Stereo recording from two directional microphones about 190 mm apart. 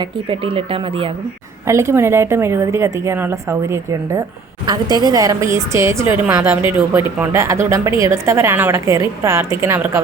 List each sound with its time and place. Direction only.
0.0 s speech: 25° right (ahead or behind)
1.6 s a woman's voice: 15° right (ahead or behind)